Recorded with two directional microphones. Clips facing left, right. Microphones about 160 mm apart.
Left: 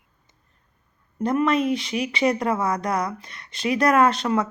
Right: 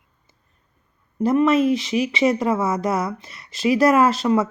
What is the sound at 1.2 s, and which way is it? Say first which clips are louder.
Speech: right 4 dB; 5° right (ahead or behind).